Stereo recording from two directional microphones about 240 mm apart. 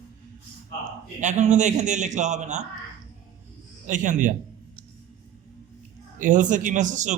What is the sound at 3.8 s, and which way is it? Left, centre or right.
Speech, right.